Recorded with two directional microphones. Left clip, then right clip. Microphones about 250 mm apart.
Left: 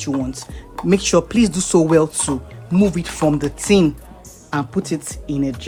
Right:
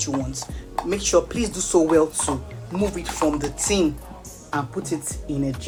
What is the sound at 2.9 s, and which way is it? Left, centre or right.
Speech, left.